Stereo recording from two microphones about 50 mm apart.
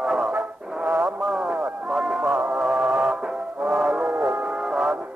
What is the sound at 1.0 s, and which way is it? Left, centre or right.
Radio, centre.